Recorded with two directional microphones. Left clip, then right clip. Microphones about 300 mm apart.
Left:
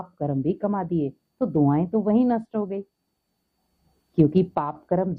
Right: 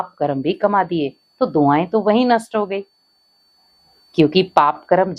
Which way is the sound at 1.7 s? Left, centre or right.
Centre.